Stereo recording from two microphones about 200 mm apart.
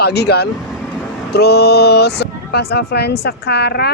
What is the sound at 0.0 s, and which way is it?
A man's voice, 55° left (ahead or behind).